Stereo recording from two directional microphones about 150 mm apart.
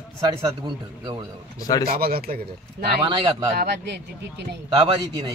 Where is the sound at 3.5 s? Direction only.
90° right.